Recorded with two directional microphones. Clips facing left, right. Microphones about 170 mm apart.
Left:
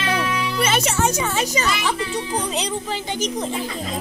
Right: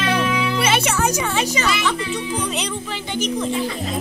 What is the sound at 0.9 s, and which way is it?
Speech, 30° left (ahead or behind).